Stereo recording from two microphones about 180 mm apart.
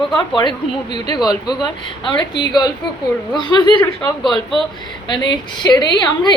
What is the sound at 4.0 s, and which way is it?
Speech, centre (ahead or behind).